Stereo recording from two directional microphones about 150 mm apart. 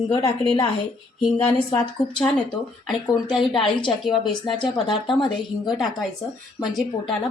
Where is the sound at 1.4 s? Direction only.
10° left (ahead or behind).